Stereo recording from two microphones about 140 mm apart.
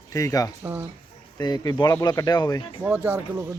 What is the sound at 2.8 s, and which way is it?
Speech, 15° right (ahead or behind).